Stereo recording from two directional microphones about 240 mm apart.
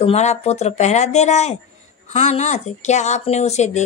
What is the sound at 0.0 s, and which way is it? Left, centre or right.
A woman's voice, left.